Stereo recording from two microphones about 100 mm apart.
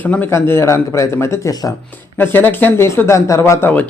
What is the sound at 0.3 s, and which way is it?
A man's voice, 25° left (ahead or behind).